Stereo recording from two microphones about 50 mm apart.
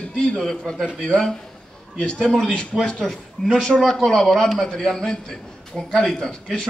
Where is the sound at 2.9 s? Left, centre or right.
Centre.